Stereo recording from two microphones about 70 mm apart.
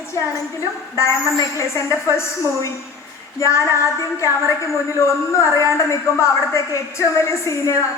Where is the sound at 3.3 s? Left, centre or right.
Left.